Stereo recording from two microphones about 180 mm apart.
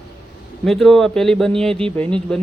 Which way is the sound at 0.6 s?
Centre (ahead or behind).